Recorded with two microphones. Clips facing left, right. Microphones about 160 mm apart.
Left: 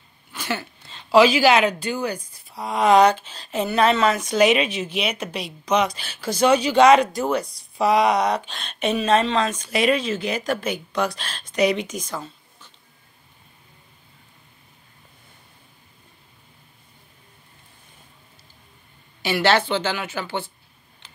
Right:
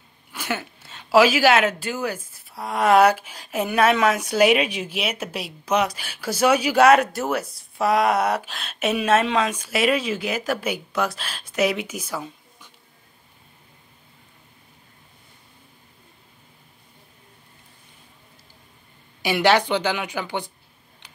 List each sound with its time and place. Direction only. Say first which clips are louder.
0.3 s speech: even; 10° right (ahead or behind)
19.2 s speech: right 1 dB; 15° right (ahead or behind)
21.0 s tick: even; 15° right (ahead or behind)